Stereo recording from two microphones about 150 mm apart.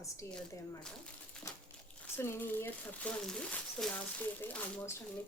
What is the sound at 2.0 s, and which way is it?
Speech, 15° left (ahead or behind).